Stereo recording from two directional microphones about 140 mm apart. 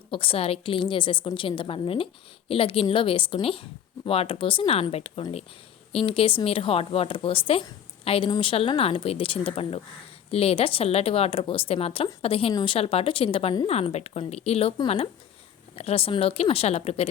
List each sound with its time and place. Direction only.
0.1 s a woman's voice: 40° left (ahead or behind)